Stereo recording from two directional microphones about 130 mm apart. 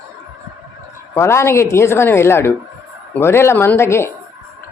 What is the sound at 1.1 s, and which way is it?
A woman's voice, 20° left (ahead or behind).